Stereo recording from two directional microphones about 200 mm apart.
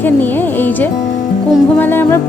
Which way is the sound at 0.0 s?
10° left (ahead or behind).